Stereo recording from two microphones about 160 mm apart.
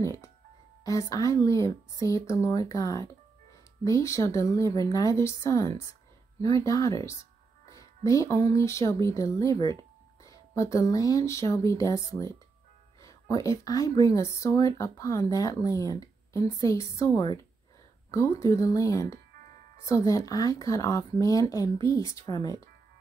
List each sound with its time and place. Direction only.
0.0 s speech: 20° left (ahead or behind)